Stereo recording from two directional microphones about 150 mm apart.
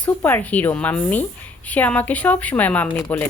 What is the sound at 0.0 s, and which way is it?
Speech, 10° left (ahead or behind).